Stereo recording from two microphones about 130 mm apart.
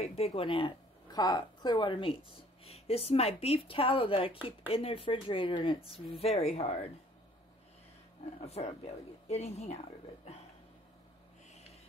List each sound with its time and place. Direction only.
0.0 s speech: 50° left (ahead or behind)
8.4 s speech: 55° left (ahead or behind)